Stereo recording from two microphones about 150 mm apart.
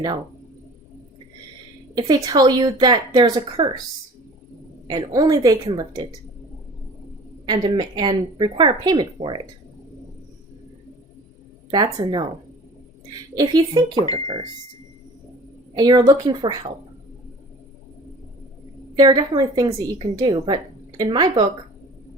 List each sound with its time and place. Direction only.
2.0 s a woman's voice: 25° right (ahead or behind)
4.9 s a woman's voice: 25° right (ahead or behind)
7.4 s a woman's voice: 30° right (ahead or behind)
11.7 s a woman's voice: 30° right (ahead or behind)
13.3 s a woman's voice: 25° right (ahead or behind)
13.9 s speech: 30° left (ahead or behind)
15.7 s a woman's voice: 30° right (ahead or behind)
18.9 s a woman's voice: 30° right (ahead or behind)